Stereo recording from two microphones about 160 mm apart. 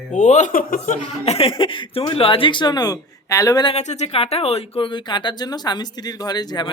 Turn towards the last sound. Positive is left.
turn(degrees=25)  # may be behind; listen again after turning